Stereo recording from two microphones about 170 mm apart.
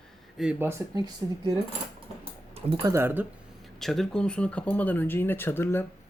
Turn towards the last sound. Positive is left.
turn(degrees=15)  # may be behind; listen again after turning